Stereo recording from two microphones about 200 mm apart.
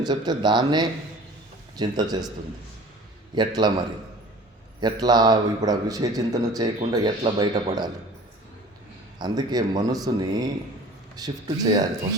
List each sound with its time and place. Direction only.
0.0 s a man's voice: 20° right (ahead or behind)
3.3 s a man's voice: 20° right (ahead or behind)
9.1 s a man's voice: 20° right (ahead or behind)